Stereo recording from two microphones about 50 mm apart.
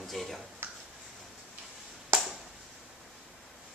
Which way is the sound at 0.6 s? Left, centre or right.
Right.